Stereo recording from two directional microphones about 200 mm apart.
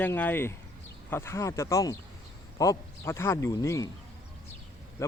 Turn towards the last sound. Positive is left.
turn(degrees=15)  # may be behind; listen again after turning